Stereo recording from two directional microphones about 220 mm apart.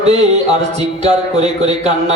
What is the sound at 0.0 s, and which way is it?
Music, 30° right (ahead or behind).